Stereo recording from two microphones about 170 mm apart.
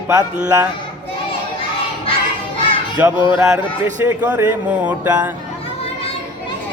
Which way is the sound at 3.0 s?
10° right (ahead or behind).